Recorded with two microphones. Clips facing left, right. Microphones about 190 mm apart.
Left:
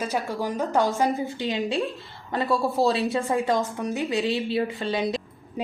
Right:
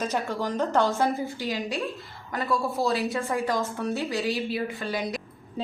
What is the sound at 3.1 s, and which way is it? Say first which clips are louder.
A woman's voice: left 3 dB; 15° left (ahead or behind).